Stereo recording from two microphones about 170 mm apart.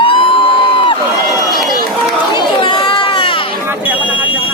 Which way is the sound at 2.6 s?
30° left (ahead or behind).